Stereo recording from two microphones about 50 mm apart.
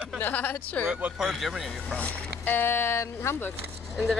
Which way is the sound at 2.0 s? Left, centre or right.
Left.